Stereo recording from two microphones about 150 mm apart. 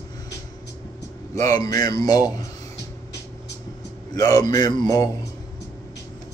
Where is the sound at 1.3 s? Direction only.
20° left (ahead or behind).